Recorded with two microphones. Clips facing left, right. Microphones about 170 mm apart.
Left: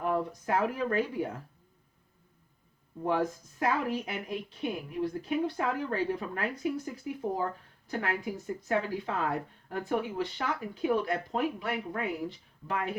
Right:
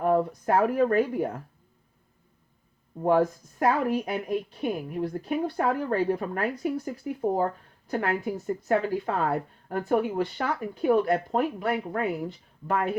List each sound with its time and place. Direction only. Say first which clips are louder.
0.0 s speech: right 7 dB; 45° right (ahead or behind)
3.0 s a woman's voice: right 7 dB; 45° right (ahead or behind)